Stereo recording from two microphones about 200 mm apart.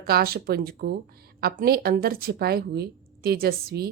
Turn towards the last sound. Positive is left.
turn(degrees=-50)  # may be behind; listen again after turning